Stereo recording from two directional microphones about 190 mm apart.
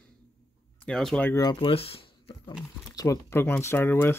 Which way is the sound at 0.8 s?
5° left (ahead or behind).